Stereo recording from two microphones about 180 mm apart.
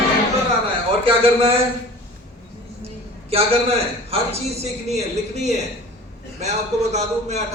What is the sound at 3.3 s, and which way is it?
A man's voice, 35° right (ahead or behind).